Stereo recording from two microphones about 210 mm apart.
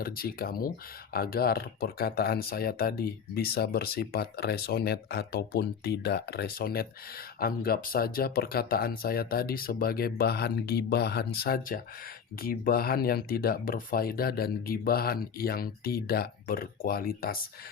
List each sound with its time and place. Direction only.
0.0 s speech: 45° left (ahead or behind)